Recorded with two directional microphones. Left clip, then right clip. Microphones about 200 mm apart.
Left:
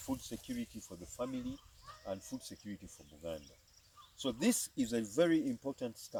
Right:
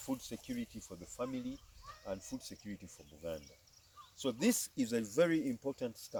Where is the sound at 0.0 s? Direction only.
20° right (ahead or behind).